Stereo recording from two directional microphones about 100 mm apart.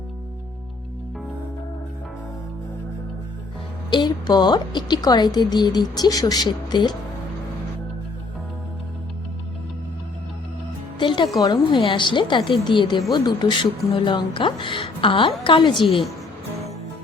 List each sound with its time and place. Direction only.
3.8 s a woman's voice: 45° left (ahead or behind)
11.0 s music: 55° left (ahead or behind)
11.3 s a woman's voice: 40° left (ahead or behind)
11.8 s a woman's voice: 55° left (ahead or behind)